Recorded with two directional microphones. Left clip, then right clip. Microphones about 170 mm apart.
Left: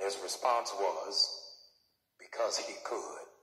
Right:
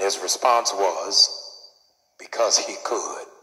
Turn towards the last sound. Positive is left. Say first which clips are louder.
# right 12 dB
turn(degrees=-35)  # may be behind; listen again after turning